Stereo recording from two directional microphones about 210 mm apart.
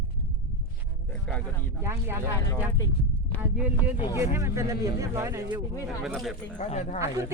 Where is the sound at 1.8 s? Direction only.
10° right (ahead or behind).